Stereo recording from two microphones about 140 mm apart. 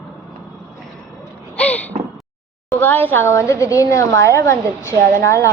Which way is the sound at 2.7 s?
15° left (ahead or behind).